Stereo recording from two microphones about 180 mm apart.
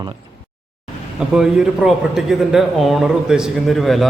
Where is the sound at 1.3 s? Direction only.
5° right (ahead or behind).